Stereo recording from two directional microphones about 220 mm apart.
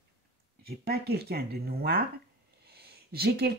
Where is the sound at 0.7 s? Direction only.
45° right (ahead or behind).